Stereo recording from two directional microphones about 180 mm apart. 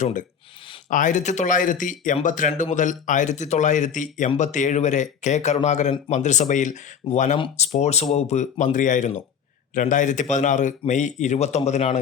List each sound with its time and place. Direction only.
0.0 s a man's voice: 45° left (ahead or behind)